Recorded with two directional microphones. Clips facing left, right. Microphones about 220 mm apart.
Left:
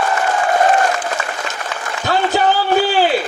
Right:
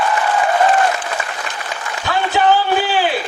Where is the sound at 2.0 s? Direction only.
40° left (ahead or behind).